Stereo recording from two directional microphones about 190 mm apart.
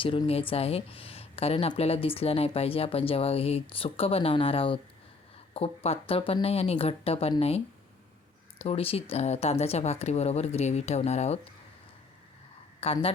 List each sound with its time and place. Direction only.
0.0 s speech: 30° left (ahead or behind)
12.8 s speech: 30° left (ahead or behind)